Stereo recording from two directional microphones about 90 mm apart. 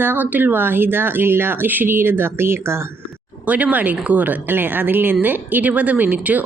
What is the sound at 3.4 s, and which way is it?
Speech, 15° right (ahead or behind).